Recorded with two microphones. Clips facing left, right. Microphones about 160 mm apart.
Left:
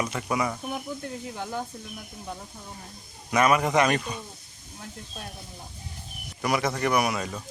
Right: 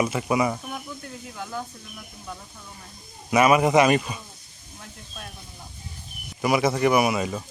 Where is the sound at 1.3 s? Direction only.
25° left (ahead or behind).